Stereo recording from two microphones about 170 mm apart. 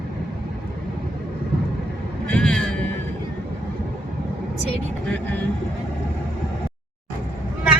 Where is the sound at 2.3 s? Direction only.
5° left (ahead or behind).